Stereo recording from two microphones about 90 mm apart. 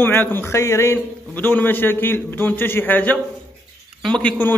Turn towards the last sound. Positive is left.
turn(degrees=20)  # may be behind; listen again after turning